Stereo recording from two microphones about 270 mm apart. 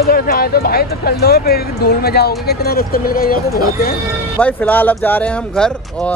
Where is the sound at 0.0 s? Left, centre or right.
Left.